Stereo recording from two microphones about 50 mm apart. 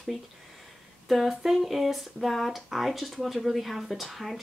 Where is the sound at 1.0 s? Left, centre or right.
Centre.